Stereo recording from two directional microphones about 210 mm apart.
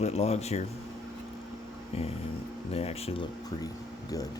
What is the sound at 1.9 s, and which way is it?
Speech, 30° left (ahead or behind).